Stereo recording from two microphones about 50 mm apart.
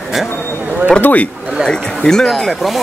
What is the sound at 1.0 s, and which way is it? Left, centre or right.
Speech, left.